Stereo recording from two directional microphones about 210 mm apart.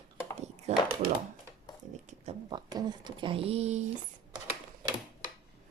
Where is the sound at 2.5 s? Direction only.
20° right (ahead or behind).